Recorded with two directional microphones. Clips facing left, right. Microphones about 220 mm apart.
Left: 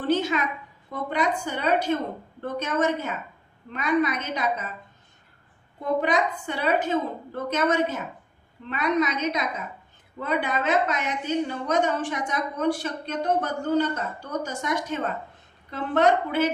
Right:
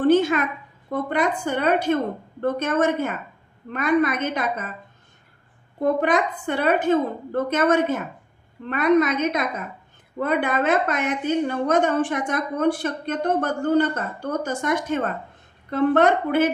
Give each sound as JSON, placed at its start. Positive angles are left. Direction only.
{"t": 0.0, "sound": "a sound", "side_deg": -55}
{"t": 0.9, "sound": "a woman's voice", "side_deg": -55}
{"t": 5.8, "sound": "a woman's voice", "side_deg": -55}